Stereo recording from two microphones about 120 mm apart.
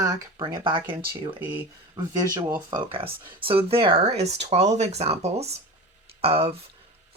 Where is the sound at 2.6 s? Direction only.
50° right (ahead or behind).